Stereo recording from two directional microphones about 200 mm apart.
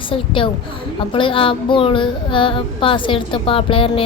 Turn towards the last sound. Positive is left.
turn(degrees=25)  # may be behind; listen again after turning